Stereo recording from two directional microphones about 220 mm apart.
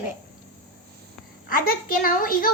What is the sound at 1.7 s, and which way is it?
Speech, 40° left (ahead or behind).